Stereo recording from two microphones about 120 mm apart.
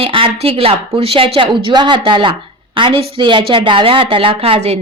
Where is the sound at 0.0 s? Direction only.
50° right (ahead or behind).